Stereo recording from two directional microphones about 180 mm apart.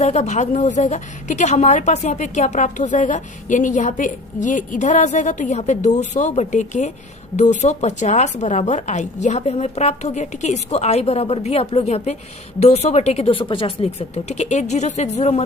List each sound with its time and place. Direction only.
0.0 s a woman's voice: 40° left (ahead or behind)